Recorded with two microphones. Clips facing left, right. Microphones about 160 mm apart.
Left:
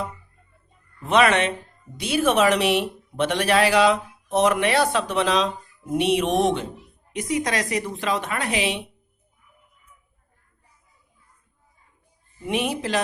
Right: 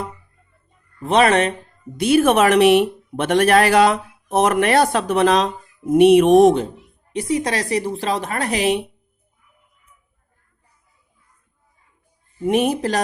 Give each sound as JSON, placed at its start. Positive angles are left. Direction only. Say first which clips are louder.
{"t": 1.0, "sound": "speech", "louder": "right 3 dB", "side_deg": -35}
{"t": 2.0, "sound": "speech", "louder": "right 6 dB", "side_deg": -55}
{"t": 7.1, "sound": "speech", "louder": "right 4 dB", "side_deg": -30}
{"t": 12.5, "sound": "speech", "louder": "right 7 dB", "side_deg": -45}